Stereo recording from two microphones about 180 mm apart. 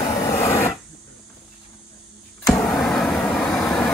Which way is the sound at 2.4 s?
Centre (ahead or behind).